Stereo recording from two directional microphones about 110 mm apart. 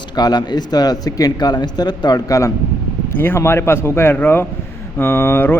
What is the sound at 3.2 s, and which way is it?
A man's voice, 20° left (ahead or behind).